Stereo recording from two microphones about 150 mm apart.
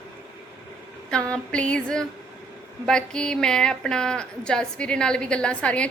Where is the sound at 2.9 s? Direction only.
5° left (ahead or behind).